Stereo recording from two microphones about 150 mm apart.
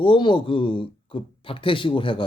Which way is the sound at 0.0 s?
35° left (ahead or behind).